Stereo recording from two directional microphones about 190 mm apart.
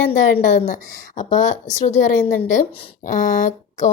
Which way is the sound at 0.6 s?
40° left (ahead or behind).